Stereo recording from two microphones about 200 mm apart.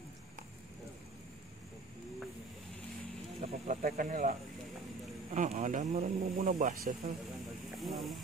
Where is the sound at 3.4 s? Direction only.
30° right (ahead or behind).